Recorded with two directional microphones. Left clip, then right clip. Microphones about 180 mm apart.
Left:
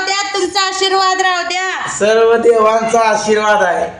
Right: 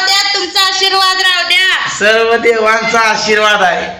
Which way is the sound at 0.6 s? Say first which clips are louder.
Right 3 dB; 90° left.